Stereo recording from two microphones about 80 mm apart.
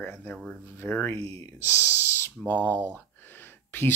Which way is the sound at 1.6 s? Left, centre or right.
Left.